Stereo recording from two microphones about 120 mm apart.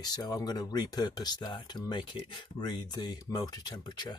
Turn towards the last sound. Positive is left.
turn(degrees=35)  # may be behind; listen again after turning